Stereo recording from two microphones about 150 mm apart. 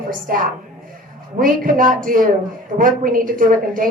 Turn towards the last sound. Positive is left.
turn(degrees=-65)  # may be behind; listen again after turning